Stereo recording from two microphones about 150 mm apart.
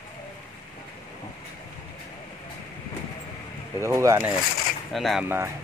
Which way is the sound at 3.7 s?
20° right (ahead or behind).